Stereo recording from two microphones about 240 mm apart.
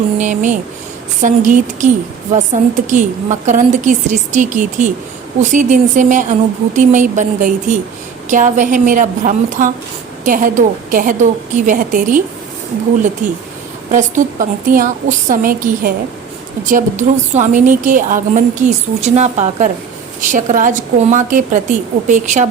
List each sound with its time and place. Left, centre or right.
0.2 s a woman's voice: right
13.2 s a woman's voice: right